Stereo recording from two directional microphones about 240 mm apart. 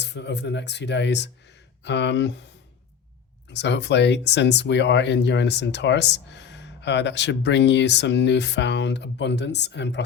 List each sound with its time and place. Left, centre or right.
0.0 s speech: left
3.5 s speech: left